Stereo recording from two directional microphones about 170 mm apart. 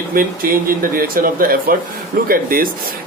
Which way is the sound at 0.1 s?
55° right (ahead or behind).